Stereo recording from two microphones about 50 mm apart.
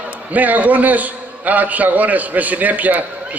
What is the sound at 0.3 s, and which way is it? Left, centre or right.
A man's voice, right.